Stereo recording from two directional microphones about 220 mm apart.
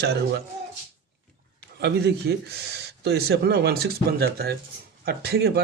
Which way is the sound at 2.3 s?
45° right (ahead or behind).